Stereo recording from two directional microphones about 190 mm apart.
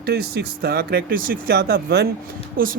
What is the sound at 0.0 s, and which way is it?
Speech, 55° right (ahead or behind).